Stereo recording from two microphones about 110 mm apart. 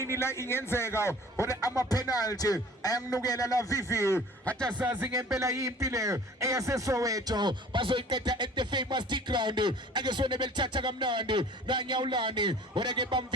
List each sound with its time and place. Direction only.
0.2 s a man's voice: 25° left (ahead or behind)
5.0 s speech: 30° right (ahead or behind); by 13.2 s 45° right (ahead or behind)